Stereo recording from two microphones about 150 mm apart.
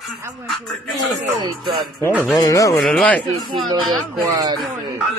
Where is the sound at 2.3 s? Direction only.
25° left (ahead or behind).